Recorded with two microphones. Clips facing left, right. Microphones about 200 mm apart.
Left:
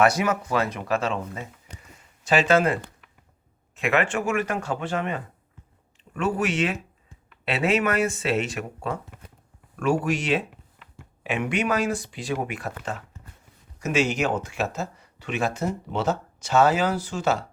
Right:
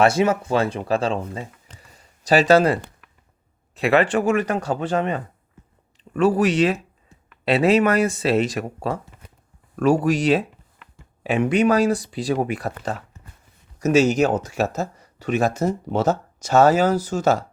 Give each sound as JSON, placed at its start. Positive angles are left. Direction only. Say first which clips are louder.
{"t": 0.0, "sound": "speech", "louder": "right 4 dB", "side_deg": -25}
{"t": 1.8, "sound": "a sound", "louder": "right 1 dB", "side_deg": -35}
{"t": 3.8, "sound": "speech", "louder": "right 6 dB", "side_deg": -35}